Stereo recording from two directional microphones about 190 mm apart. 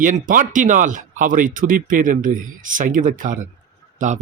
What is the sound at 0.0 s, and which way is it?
Speech, 45° right (ahead or behind).